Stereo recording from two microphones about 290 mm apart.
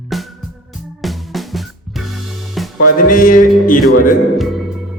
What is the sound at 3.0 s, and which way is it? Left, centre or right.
Music, left.